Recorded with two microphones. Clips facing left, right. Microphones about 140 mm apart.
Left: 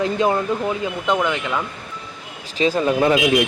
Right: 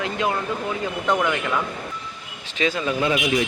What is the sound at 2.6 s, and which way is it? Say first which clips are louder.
Speech: left 5 dB; 40° left (ahead or behind).